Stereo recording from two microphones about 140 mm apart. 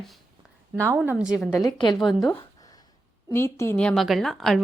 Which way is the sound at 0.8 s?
20° right (ahead or behind).